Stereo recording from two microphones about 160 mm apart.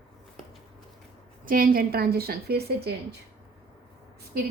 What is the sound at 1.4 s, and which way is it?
A woman's voice, 65° right (ahead or behind).